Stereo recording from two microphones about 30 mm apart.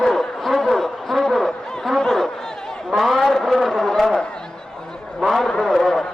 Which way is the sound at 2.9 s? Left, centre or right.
Centre.